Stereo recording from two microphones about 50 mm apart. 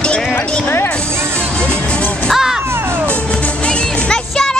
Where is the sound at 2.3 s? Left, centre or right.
Centre.